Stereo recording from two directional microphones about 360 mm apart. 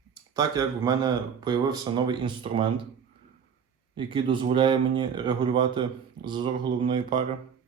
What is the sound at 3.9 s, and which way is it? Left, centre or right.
Speech, centre.